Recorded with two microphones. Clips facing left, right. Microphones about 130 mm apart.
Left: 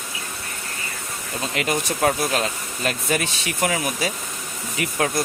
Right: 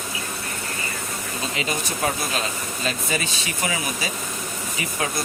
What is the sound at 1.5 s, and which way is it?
Speech, 60° left (ahead or behind).